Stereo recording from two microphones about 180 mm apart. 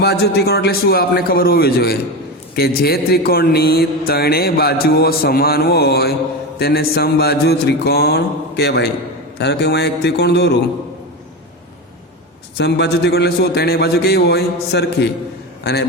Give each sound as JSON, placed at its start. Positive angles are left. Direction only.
{"t": 0.0, "sound": "a man's voice", "side_deg": 65}
{"t": 12.5, "sound": "a man's voice", "side_deg": 70}